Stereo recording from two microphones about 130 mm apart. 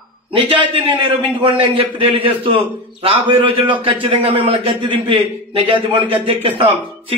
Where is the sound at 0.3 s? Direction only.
40° right (ahead or behind).